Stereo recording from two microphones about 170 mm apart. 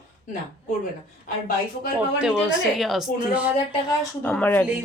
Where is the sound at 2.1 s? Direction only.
5° right (ahead or behind).